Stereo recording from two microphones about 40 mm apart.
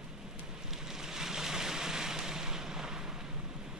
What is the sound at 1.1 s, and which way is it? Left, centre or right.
Boat, centre.